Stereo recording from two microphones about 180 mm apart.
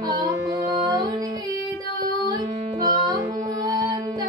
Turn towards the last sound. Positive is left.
turn(degrees=-20)  # may be behind; listen again after turning